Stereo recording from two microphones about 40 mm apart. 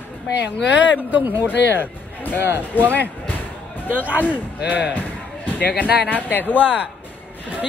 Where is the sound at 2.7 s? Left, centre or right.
Left.